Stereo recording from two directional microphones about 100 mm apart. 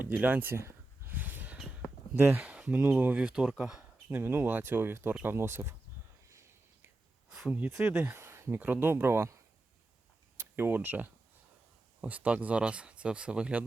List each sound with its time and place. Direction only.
0.0 s a sound: 20° right (ahead or behind)
2.4 s speech: 10° right (ahead or behind)
3.6 s a sound: 10° right (ahead or behind)
4.2 s speech: 20° right (ahead or behind)
7.3 s speech: 10° right (ahead or behind)
8.1 s speech: 25° right (ahead or behind)
10.5 s speech: 20° right (ahead or behind)